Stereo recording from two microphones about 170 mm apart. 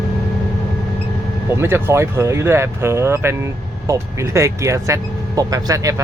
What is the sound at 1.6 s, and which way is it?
Speech, 15° right (ahead or behind).